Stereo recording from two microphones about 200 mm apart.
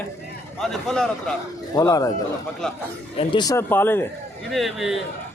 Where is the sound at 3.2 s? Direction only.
25° left (ahead or behind).